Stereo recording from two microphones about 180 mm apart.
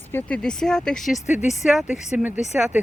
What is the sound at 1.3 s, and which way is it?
Speech, 40° left (ahead or behind).